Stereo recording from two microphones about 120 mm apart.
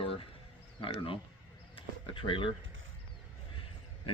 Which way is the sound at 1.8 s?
45° left (ahead or behind).